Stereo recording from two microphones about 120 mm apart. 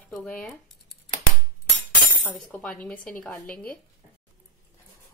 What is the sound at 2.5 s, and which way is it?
Speech, 15° left (ahead or behind).